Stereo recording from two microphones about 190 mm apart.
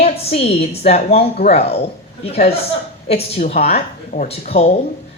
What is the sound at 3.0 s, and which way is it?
A woman's voice, 35° left (ahead or behind).